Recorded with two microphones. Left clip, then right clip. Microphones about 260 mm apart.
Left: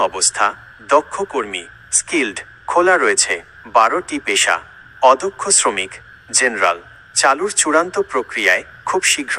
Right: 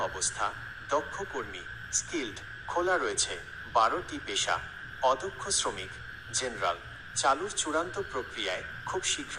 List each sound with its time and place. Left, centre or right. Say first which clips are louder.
0.1 s speech: left 15 dB; left